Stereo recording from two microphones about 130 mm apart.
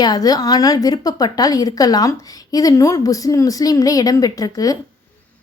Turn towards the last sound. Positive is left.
turn(degrees=30)  # may be behind; listen again after turning